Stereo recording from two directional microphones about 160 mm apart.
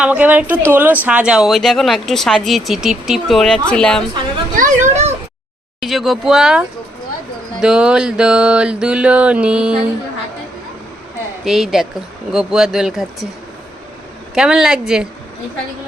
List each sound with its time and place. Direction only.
0.0 s mantra: 10° right (ahead or behind)
1.0 s speech: 5° right (ahead or behind)
4.5 s children playing: 50° right (ahead or behind)
5.8 s speech: centre (ahead or behind)
7.6 s mantra: 5° right (ahead or behind)
11.4 s speech: centre (ahead or behind)
14.3 s speech: 5° right (ahead or behind)